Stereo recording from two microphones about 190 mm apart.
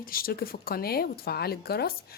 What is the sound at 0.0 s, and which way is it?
Speech, 50° left (ahead or behind).